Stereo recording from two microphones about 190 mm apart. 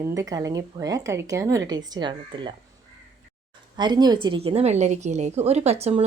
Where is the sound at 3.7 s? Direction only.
20° right (ahead or behind).